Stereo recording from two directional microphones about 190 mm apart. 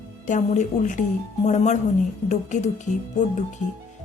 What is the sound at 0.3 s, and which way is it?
Speech, 40° left (ahead or behind).